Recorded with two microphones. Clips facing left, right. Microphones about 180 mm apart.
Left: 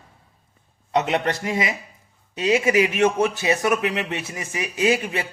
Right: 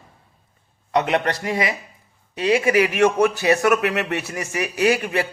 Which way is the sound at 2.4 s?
25° left (ahead or behind).